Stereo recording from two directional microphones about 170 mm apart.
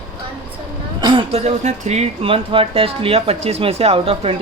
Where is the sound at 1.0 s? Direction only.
30° right (ahead or behind).